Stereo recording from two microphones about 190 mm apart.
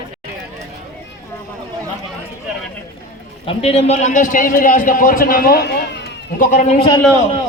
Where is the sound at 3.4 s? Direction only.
30° left (ahead or behind).